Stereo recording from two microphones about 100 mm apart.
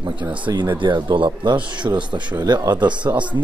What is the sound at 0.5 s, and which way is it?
Speech, 50° right (ahead or behind).